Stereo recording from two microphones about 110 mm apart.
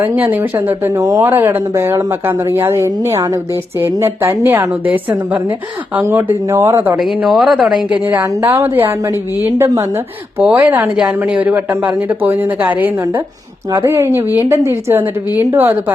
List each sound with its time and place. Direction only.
0.0 s speech: 15° right (ahead or behind)
6.9 s speech: 5° right (ahead or behind)
8.0 s speech: 25° right (ahead or behind)
13.7 s speech: 25° right (ahead or behind)